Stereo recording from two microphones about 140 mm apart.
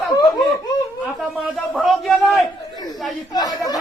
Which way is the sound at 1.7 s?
Centre (ahead or behind).